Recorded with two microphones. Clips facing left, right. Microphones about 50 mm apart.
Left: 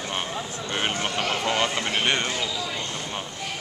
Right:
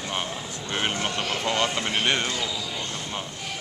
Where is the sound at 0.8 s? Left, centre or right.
Centre.